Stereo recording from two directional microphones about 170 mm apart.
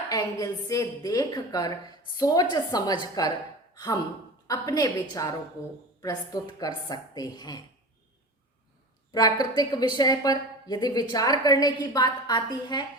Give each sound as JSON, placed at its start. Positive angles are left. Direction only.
{"t": 0.1, "sound": "a woman's voice", "side_deg": 20}
{"t": 4.4, "sound": "a woman's voice", "side_deg": 20}
{"t": 9.1, "sound": "a woman's voice", "side_deg": 25}